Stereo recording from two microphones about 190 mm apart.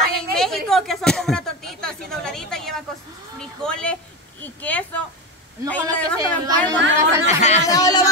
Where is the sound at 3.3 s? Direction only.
5° left (ahead or behind).